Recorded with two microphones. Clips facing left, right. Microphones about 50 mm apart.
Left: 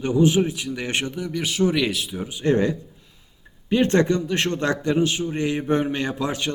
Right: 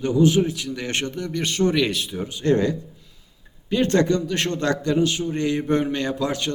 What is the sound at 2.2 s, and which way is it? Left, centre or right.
A man's voice, centre.